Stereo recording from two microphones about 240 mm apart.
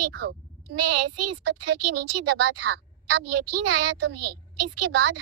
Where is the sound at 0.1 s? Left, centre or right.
Right.